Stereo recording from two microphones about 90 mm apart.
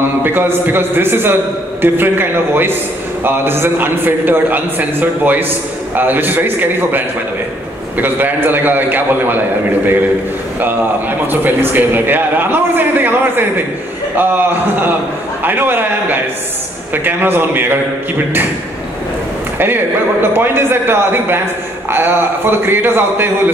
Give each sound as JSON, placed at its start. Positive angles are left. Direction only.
{"t": 0.2, "sound": "a man's voice", "side_deg": -25}
{"t": 8.0, "sound": "a man's voice", "side_deg": -20}
{"t": 11.4, "sound": "a man's voice", "side_deg": -20}
{"t": 19.6, "sound": "a man's voice", "side_deg": -25}